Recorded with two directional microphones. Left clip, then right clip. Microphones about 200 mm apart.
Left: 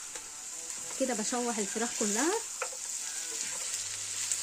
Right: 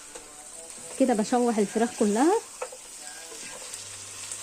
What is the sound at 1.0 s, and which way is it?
Speech, 35° right (ahead or behind).